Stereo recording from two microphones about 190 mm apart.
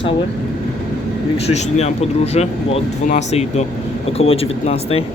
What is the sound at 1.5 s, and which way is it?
Speech, 35° left (ahead or behind).